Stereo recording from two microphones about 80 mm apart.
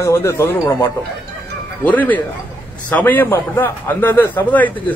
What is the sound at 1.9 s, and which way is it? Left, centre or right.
A man's voice, centre.